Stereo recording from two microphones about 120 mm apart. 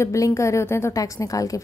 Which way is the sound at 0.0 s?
25° left (ahead or behind).